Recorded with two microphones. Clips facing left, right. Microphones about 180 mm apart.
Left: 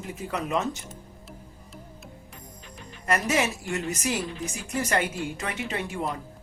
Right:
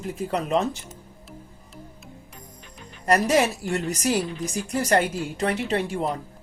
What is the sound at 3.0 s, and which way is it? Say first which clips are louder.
A woman's voice: right 5 dB; 35° right (ahead or behind).